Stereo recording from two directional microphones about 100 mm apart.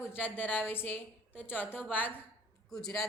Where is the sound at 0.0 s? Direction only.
20° left (ahead or behind).